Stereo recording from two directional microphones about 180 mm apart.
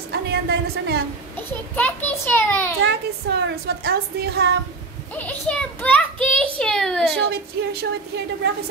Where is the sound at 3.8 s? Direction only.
65° right (ahead or behind).